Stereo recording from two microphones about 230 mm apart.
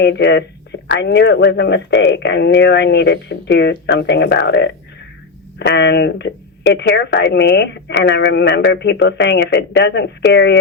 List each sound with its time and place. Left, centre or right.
0.0 s speech: left